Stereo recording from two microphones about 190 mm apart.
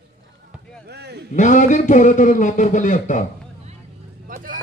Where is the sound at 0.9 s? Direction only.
60° right (ahead or behind).